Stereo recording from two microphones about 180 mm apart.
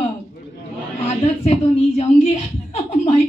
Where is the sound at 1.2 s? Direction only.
35° left (ahead or behind).